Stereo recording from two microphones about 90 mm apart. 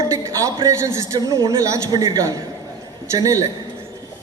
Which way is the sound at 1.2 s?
45° right (ahead or behind).